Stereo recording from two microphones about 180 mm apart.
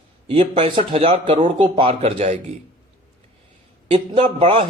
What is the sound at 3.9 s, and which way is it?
Speech, 30° right (ahead or behind).